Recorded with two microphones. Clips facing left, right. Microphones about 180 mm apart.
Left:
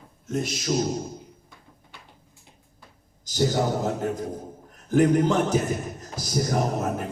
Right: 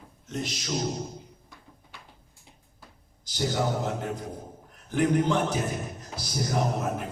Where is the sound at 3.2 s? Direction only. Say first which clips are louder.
Left 4 dB; 45° left (ahead or behind).